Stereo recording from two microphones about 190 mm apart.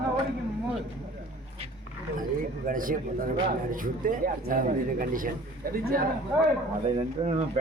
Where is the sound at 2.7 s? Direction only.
45° right (ahead or behind).